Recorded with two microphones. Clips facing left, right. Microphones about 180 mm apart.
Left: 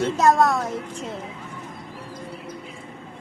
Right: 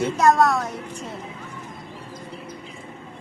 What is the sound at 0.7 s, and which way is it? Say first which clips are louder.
Speech: left 3 dB; centre (ahead or behind).